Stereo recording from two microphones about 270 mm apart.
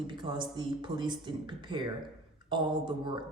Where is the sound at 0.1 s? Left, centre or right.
Centre.